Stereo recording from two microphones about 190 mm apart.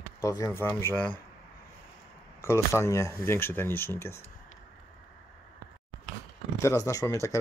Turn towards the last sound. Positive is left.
turn(degrees=15)  # may be behind; listen again after turning